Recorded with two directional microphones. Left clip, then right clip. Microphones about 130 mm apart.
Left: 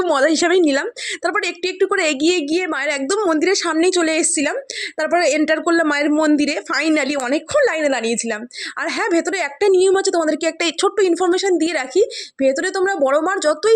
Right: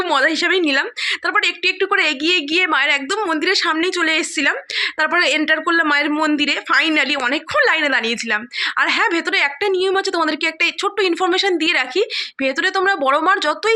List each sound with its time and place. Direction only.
0.0 s speech: 50° left (ahead or behind)
0.3 s a woman's voice: 65° left (ahead or behind)
2.5 s speech: 40° left (ahead or behind)
4.8 s a woman's voice: 40° left (ahead or behind)
5.5 s speech: 55° left (ahead or behind)
7.5 s a woman's voice: 40° left (ahead or behind)
9.6 s speech: 65° left (ahead or behind); by 10.5 s 45° left (ahead or behind)
10.6 s speech: 70° left (ahead or behind)
10.9 s a woman's voice: 40° left (ahead or behind)